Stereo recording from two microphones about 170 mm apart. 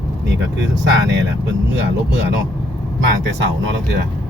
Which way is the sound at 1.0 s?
90° right.